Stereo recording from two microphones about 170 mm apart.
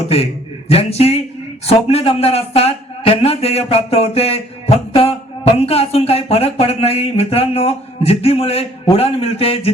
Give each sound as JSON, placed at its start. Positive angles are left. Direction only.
{"t": 0.7, "sound": "speech", "side_deg": 35}